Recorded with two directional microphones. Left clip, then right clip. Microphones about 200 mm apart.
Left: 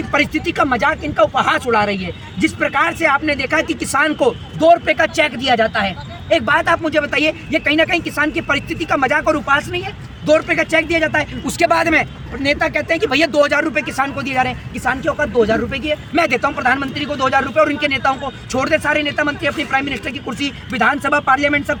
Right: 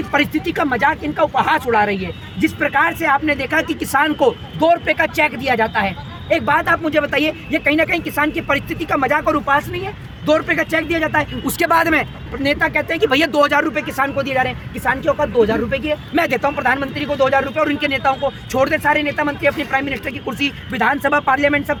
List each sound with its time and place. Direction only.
0.1 s speech: centre (ahead or behind)